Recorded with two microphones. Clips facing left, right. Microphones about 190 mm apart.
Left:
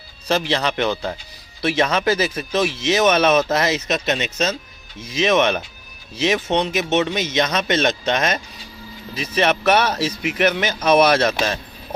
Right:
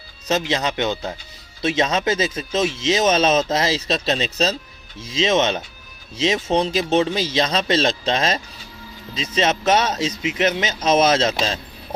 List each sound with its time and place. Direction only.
0.3 s speech: 20° right (ahead or behind)